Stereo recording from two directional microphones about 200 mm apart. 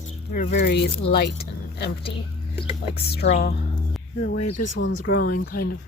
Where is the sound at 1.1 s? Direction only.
50° left (ahead or behind).